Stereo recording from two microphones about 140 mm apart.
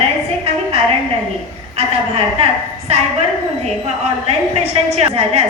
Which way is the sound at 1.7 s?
45° right (ahead or behind).